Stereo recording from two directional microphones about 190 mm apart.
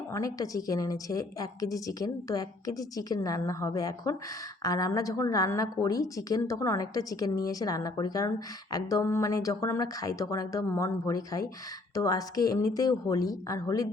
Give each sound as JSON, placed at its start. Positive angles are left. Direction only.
{"t": 0.1, "sound": "a woman's voice", "side_deg": 15}